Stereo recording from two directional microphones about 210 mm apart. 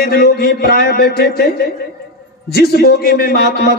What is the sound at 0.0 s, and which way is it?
A man's voice, 45° left (ahead or behind).